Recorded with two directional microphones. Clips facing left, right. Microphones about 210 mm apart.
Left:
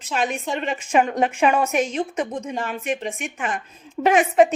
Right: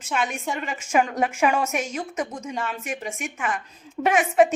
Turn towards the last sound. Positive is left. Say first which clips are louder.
# left 3 dB
turn(degrees=30)  # may be behind; listen again after turning